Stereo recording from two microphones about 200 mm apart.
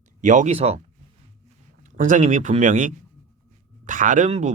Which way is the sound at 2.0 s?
40° right (ahead or behind).